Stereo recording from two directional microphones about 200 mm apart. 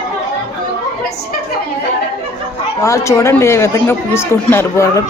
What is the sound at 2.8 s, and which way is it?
Speech, 15° left (ahead or behind).